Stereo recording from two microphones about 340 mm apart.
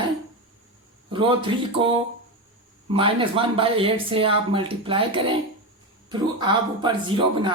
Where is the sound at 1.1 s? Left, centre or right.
Centre.